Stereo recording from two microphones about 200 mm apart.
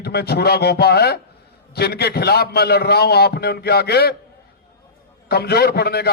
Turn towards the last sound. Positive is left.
turn(degrees=50)  # may be behind; listen again after turning